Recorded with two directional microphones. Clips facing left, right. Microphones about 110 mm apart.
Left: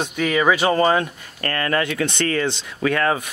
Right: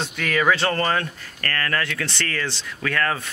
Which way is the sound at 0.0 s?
15° left (ahead or behind).